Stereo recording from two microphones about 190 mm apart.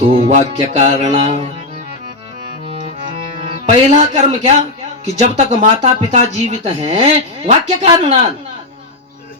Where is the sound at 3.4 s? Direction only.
30° right (ahead or behind).